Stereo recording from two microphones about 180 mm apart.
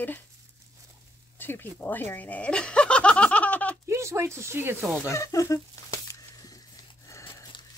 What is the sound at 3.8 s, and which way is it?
Speech, 15° right (ahead or behind).